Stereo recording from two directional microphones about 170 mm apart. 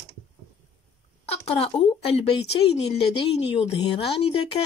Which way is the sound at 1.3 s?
35° left (ahead or behind).